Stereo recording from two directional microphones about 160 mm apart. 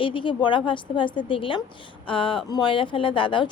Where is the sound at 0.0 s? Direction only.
30° left (ahead or behind).